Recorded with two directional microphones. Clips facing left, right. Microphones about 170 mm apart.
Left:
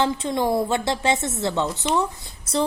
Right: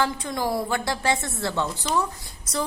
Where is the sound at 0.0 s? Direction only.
25° left (ahead or behind).